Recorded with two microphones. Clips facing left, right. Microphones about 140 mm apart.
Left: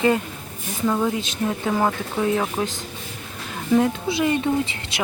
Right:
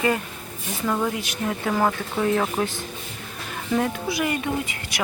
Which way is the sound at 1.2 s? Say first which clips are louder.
Left 2 dB; 20° left (ahead or behind).